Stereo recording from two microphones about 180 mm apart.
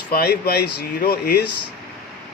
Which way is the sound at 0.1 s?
60° left (ahead or behind).